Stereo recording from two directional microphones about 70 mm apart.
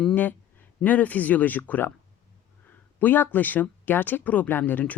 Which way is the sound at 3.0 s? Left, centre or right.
Left.